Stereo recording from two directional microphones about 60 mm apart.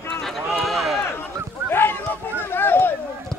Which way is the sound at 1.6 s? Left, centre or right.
Left.